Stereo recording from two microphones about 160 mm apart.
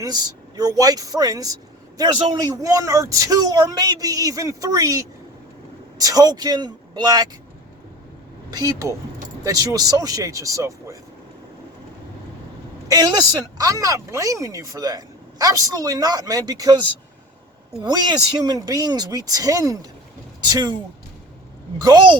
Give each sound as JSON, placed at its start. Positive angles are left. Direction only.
{"t": 0.0, "sound": "speech", "side_deg": -25}
{"t": 8.4, "sound": "speech", "side_deg": -25}
{"t": 12.9, "sound": "speech", "side_deg": -25}
{"t": 21.8, "sound": "speech", "side_deg": -25}